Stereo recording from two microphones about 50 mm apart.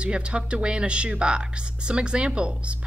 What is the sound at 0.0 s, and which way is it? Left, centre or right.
A woman's voice, right.